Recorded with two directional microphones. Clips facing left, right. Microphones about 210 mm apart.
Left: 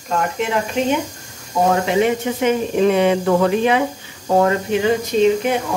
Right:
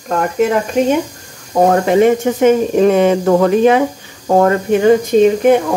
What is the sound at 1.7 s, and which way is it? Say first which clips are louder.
Speech: right 6 dB; 50° right (ahead or behind).